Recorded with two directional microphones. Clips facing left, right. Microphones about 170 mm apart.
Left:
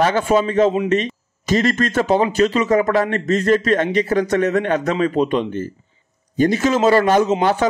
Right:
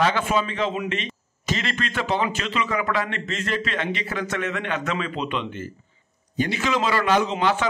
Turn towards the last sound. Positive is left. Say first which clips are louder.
# left 6 dB
turn(degrees=45)  # may be behind; listen again after turning